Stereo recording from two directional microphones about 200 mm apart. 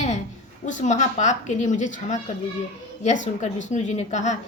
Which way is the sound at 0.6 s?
40° left (ahead or behind).